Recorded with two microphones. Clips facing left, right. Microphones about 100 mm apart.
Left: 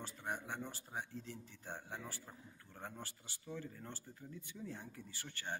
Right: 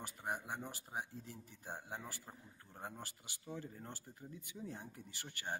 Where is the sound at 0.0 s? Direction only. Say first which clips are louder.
Right 1 dB; 10° right (ahead or behind).